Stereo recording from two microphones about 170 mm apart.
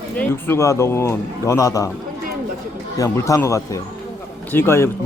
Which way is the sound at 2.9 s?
20° left (ahead or behind).